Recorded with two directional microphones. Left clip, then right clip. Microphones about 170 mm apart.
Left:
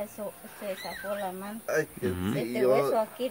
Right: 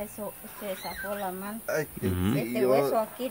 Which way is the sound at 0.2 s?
15° right (ahead or behind).